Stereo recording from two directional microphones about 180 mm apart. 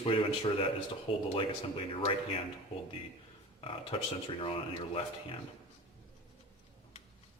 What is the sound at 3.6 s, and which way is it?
Speech, 30° left (ahead or behind).